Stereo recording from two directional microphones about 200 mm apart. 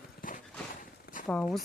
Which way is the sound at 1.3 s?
5° left (ahead or behind).